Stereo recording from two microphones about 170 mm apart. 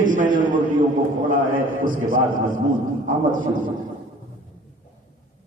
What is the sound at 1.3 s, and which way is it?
A man's voice, 55° right (ahead or behind).